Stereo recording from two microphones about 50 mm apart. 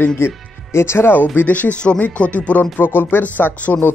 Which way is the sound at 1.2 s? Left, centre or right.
Left.